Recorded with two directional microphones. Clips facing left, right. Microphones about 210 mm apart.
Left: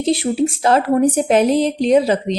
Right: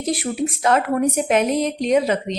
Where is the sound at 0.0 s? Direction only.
25° left (ahead or behind).